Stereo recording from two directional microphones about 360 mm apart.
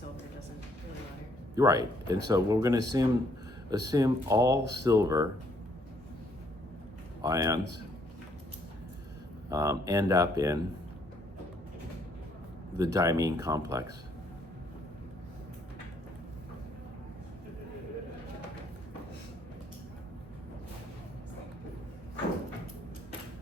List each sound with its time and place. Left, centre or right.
1.5 s speech: centre
7.2 s speech: centre
9.5 s speech: centre
12.7 s speech: centre